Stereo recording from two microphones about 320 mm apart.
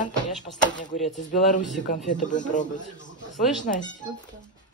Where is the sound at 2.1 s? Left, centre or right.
Left.